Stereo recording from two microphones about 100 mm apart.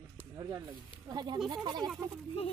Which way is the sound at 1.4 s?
45° right (ahead or behind).